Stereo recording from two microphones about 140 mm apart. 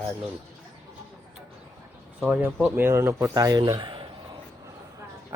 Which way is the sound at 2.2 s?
10° right (ahead or behind).